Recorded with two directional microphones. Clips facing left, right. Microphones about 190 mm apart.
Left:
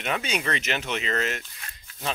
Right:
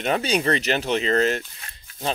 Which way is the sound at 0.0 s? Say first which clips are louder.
Right 6 dB; 35° right (ahead or behind).